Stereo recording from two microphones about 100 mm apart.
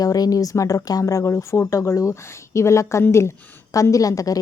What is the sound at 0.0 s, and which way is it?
Speech, 35° left (ahead or behind).